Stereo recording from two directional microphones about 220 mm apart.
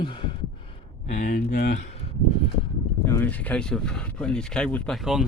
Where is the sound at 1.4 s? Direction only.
50° left (ahead or behind).